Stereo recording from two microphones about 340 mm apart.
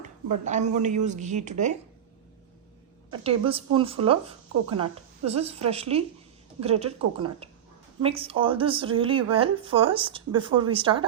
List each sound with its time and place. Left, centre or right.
0.4 s a man's voice: right
3.1 s speech: centre